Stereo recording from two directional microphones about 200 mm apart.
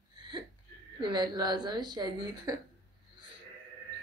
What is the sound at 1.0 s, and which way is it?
Speech, 20° right (ahead or behind).